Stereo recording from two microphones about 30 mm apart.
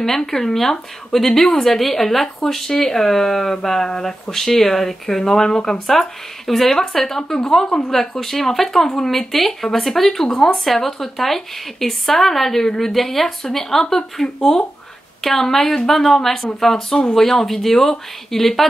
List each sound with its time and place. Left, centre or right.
0.0 s a woman's voice: centre